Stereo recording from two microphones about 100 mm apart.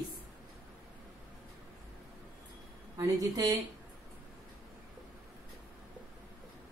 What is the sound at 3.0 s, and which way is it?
Speech, 40° right (ahead or behind).